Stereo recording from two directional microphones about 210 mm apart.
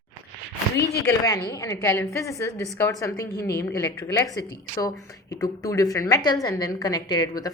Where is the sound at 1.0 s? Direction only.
15° left (ahead or behind).